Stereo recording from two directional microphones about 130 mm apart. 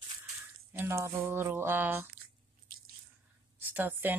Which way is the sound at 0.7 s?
20° right (ahead or behind).